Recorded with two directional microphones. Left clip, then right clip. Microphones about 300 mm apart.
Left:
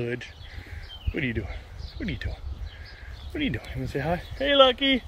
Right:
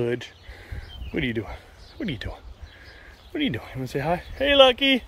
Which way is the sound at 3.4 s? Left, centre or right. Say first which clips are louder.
Right 3 dB; centre.